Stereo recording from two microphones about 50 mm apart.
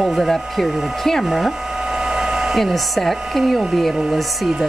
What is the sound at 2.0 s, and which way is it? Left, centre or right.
Hair dryer, centre.